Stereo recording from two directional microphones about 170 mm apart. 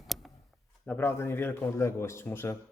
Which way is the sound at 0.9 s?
15° left (ahead or behind).